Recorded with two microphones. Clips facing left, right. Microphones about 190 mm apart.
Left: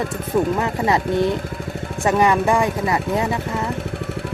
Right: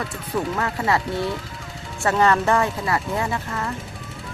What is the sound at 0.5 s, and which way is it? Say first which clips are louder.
Speech: left 3 dB; 20° left (ahead or behind).